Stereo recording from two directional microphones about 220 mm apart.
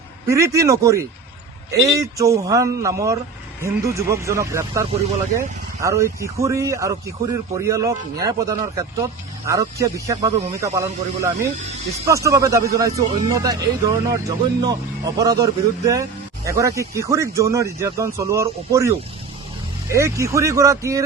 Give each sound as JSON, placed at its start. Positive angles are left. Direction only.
{"t": 0.3, "sound": "speech", "side_deg": -15}